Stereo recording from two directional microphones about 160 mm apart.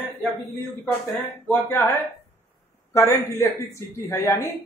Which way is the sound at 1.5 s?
15° left (ahead or behind).